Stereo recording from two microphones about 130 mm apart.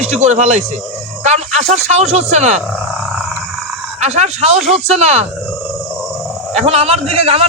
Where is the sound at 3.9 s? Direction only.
60° right (ahead or behind).